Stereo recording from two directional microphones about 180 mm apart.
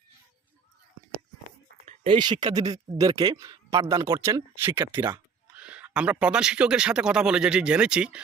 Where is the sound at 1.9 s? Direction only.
25° right (ahead or behind).